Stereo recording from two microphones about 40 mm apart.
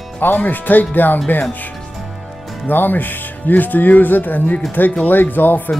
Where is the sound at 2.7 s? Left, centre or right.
Left.